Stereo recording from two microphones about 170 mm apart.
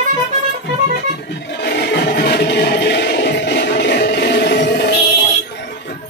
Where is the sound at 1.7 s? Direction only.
70° left (ahead or behind).